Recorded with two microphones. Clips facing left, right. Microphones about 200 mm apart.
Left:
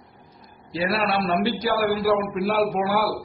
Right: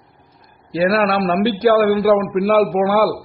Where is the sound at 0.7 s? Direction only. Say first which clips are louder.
Right 8 dB; 60° right (ahead or behind).